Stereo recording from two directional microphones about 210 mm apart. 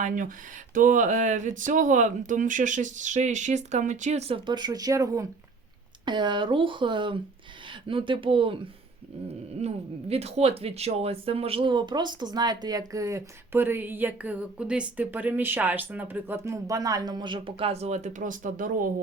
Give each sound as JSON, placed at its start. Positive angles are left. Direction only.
{"t": 0.0, "sound": "speech", "side_deg": -40}
{"t": 9.6, "sound": "speech", "side_deg": -30}